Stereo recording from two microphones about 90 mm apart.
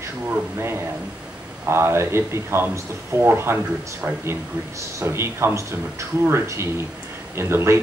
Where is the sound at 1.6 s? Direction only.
30° right (ahead or behind).